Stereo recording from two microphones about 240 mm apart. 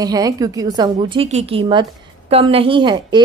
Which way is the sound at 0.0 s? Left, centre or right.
Centre.